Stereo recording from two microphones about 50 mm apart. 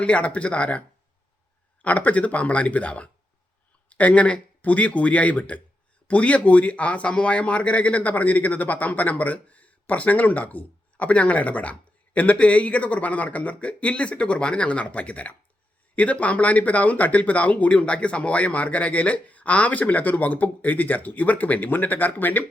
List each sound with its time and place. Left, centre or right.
0.0 s speech: left
1.8 s speech: left